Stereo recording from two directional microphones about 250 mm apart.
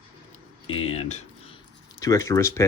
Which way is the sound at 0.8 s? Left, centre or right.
Left.